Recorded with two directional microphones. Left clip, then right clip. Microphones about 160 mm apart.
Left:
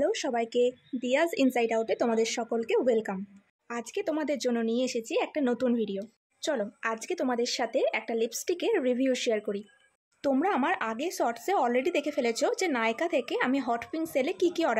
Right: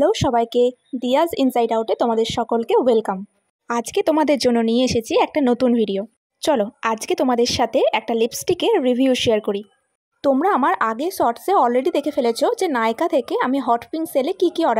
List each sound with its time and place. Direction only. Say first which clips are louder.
0.0 s speech: right 11 dB; 35° right (ahead or behind)
3.6 s speech: right 13 dB; 45° right (ahead or behind)